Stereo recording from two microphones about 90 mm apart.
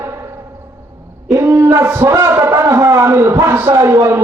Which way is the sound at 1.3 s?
35° right (ahead or behind).